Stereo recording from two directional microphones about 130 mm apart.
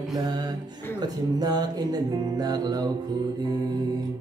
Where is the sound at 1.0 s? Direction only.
30° right (ahead or behind).